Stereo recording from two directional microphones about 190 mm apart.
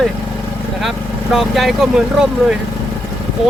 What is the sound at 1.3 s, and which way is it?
Speech, centre (ahead or behind).